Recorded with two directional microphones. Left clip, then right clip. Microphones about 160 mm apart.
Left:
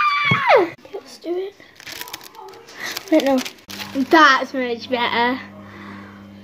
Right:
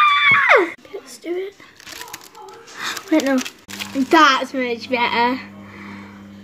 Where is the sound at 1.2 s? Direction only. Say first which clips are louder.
Even; 25° right (ahead or behind).